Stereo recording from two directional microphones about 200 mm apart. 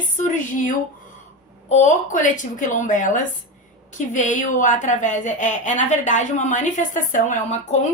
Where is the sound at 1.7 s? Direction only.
40° left (ahead or behind).